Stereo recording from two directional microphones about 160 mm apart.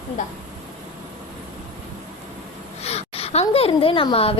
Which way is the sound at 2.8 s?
40° left (ahead or behind).